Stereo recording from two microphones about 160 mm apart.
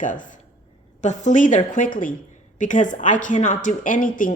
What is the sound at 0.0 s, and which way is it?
A woman's voice, 55° left (ahead or behind).